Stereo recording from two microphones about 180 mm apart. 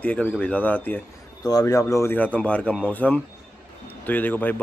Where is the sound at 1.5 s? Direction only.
20° left (ahead or behind).